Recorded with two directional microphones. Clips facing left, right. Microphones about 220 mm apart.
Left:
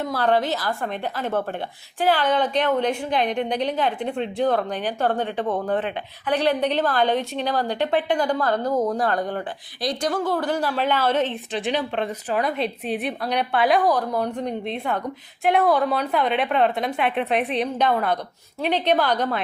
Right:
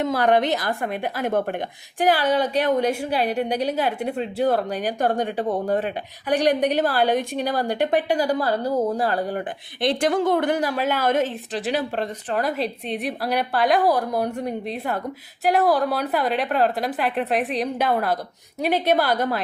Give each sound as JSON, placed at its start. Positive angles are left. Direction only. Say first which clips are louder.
{"t": 0.0, "sound": "a woman's voice", "louder": "right 2 dB", "side_deg": -15}
{"t": 9.8, "sound": "a woman's voice", "louder": "right 4 dB", "side_deg": -25}
{"t": 10.6, "sound": "a woman's voice", "louder": "even", "side_deg": -10}